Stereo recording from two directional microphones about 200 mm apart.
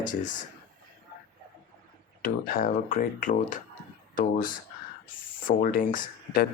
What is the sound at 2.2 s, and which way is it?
Speech, 45° left (ahead or behind).